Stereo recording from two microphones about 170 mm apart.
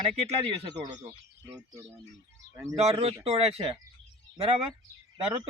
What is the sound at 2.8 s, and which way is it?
Speech, 35° right (ahead or behind).